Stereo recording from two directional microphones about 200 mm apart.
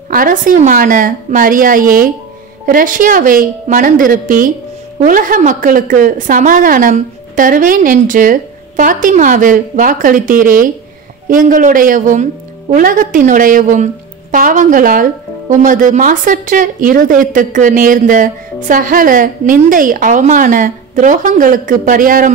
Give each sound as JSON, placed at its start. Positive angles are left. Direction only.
{"t": 0.1, "sound": "a woman's voice", "side_deg": -45}